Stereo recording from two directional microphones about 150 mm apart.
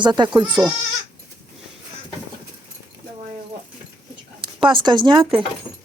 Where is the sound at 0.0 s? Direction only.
30° right (ahead or behind).